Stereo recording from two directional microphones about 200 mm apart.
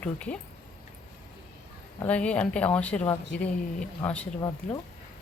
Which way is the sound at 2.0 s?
5° left (ahead or behind).